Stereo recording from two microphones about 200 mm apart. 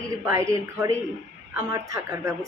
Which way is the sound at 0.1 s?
15° right (ahead or behind).